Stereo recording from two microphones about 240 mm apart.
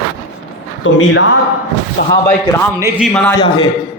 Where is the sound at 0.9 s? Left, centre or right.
Left.